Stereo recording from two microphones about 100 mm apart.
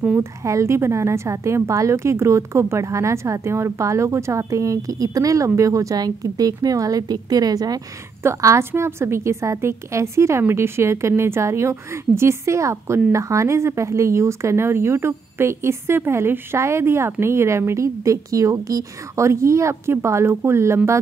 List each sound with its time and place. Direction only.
0.2 s a woman's voice: 30° right (ahead or behind)